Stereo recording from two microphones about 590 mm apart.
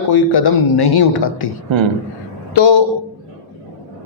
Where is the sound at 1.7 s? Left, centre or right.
Right.